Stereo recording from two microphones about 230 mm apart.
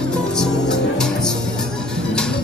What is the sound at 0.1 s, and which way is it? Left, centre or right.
Music, centre.